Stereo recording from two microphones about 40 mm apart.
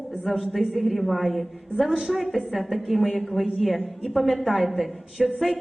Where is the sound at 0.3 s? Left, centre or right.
Centre.